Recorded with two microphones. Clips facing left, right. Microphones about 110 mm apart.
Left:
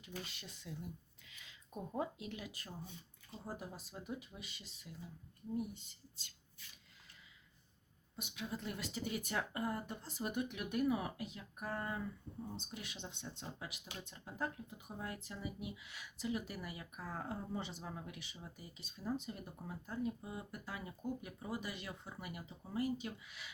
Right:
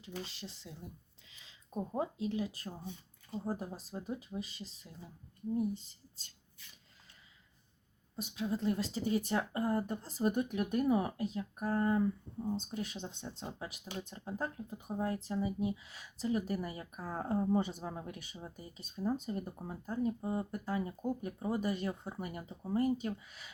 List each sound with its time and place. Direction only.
0.0 s speech: 30° right (ahead or behind)
8.1 s speech: 35° right (ahead or behind)